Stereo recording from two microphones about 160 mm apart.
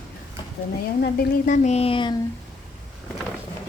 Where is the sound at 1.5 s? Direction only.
45° left (ahead or behind).